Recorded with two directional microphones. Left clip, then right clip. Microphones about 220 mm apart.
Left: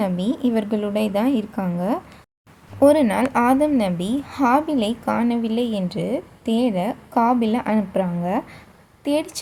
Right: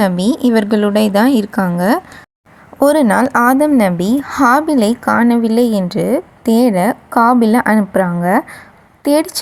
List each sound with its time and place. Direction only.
0.0 s a woman's voice: 25° right (ahead or behind)